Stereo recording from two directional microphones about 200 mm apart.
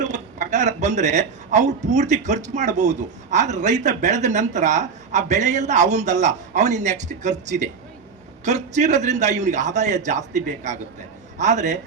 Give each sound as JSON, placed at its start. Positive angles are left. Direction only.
{"t": 0.0, "sound": "a man's voice", "side_deg": -35}